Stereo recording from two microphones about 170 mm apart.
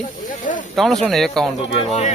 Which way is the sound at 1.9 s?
40° left (ahead or behind).